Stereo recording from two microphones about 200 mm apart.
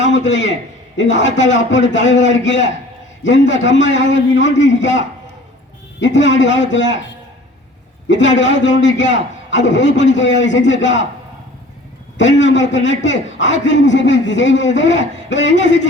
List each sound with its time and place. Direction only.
0.0 s a man's voice: 65° left (ahead or behind)
6.0 s a man's voice: 65° left (ahead or behind)
8.0 s a man's voice: 65° left (ahead or behind)
12.4 s a man's voice: 65° left (ahead or behind)